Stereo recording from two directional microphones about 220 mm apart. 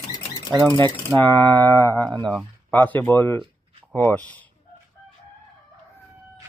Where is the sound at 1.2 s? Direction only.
10° left (ahead or behind).